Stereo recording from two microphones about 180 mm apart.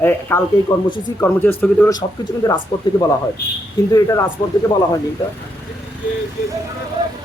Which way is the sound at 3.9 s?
20° left (ahead or behind).